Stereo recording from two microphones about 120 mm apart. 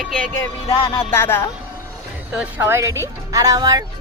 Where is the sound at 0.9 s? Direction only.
20° left (ahead or behind).